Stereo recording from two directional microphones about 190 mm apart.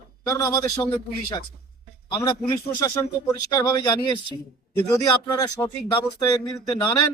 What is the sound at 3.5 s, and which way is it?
Speech, 20° left (ahead or behind).